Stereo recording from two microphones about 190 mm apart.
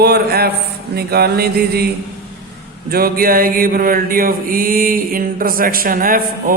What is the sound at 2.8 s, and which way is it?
Mantra, 50° right (ahead or behind).